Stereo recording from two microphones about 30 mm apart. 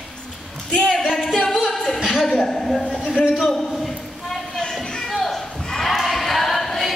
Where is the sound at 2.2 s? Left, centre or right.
Centre.